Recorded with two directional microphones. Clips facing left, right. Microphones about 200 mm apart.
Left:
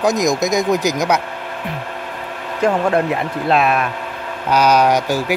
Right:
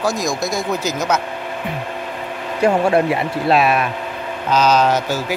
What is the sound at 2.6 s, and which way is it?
Speech, 10° right (ahead or behind).